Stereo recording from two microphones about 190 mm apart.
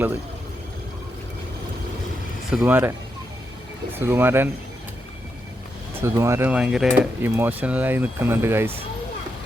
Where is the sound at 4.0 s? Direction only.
10° right (ahead or behind).